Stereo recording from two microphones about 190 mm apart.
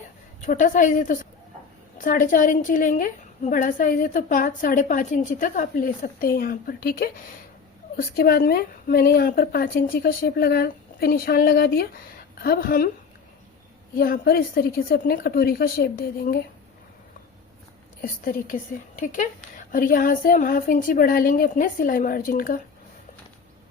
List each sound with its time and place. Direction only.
0.4 s a woman's voice: 40° left (ahead or behind)
14.0 s a woman's voice: 55° left (ahead or behind)
18.0 s a woman's voice: 45° left (ahead or behind)